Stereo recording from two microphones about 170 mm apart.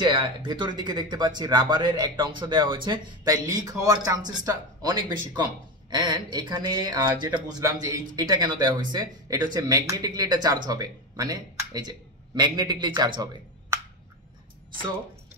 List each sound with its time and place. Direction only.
0.0 s speech: 30° right (ahead or behind)